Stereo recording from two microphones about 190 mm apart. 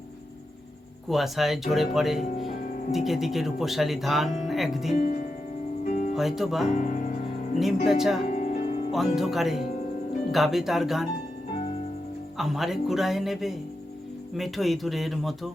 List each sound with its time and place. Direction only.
1.0 s speech: centre (ahead or behind)
4.9 s music: 45° left (ahead or behind)
6.1 s speech: centre (ahead or behind)
6.7 s speech: 45° left (ahead or behind)
7.9 s speech: centre (ahead or behind)
8.3 s music: 45° left (ahead or behind)
8.9 s speech: centre (ahead or behind)
11.5 s music: 30° left (ahead or behind)
12.4 s speech: centre (ahead or behind)